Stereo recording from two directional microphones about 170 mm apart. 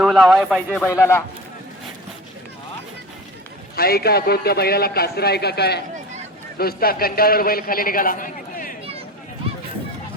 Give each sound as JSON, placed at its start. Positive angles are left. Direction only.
{"t": 0.0, "sound": "speech", "side_deg": 0}
{"t": 0.9, "sound": "speech", "side_deg": 15}
{"t": 3.8, "sound": "a man's voice", "side_deg": 65}